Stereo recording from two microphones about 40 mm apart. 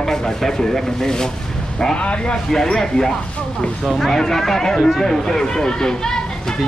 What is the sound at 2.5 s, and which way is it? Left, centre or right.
Speech, centre.